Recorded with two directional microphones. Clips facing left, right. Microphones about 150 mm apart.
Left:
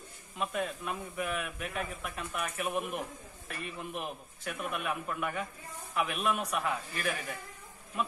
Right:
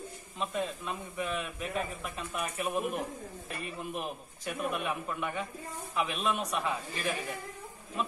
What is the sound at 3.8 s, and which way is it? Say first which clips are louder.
A man's voice: right 2 dB; centre (ahead or behind).